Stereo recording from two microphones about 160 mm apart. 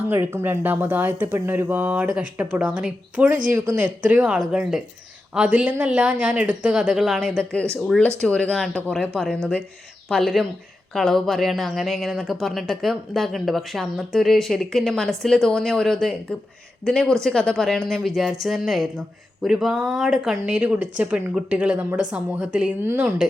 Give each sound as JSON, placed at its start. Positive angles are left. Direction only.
{"t": 0.1, "sound": "speech", "side_deg": -15}
{"t": 4.1, "sound": "speech", "side_deg": -5}